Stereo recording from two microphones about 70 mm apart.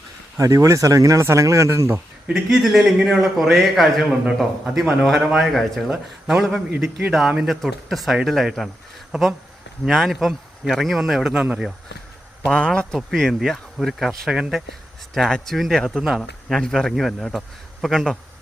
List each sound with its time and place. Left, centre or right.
0.3 s speech: right
2.3 s a man's voice: centre
11.3 s speech: right
12.5 s a man's voice: centre
13.0 s a man's voice: centre
16.6 s a man's voice: centre